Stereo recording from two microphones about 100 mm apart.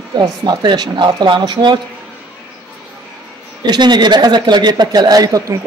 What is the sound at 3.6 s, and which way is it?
Speech, 45° right (ahead or behind).